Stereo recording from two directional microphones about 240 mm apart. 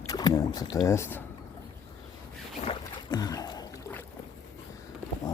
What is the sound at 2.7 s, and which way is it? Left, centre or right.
Boat, centre.